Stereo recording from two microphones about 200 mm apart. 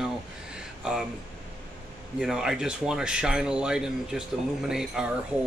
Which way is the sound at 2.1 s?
5° right (ahead or behind).